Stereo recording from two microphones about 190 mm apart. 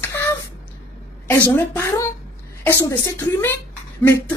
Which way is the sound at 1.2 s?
10° left (ahead or behind).